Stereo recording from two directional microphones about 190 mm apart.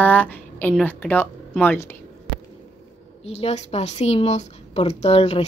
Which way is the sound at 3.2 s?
35° left (ahead or behind).